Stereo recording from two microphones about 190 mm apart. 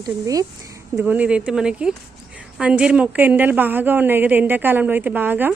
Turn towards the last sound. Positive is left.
turn(degrees=-10)  # may be behind; listen again after turning